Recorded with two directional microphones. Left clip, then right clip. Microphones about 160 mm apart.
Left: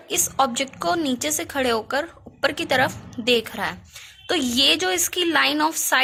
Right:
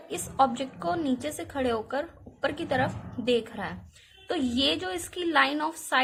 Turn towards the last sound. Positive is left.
turn(degrees=20)  # may be behind; listen again after turning